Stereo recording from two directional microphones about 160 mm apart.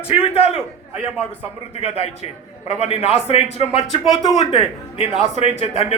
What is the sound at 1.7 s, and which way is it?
A man's voice, 40° left (ahead or behind).